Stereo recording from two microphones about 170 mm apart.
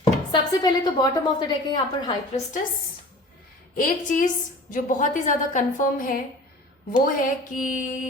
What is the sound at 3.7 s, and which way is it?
Speech, 55° left (ahead or behind).